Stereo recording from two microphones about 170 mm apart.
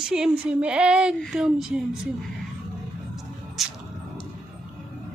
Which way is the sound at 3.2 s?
Centre (ahead or behind).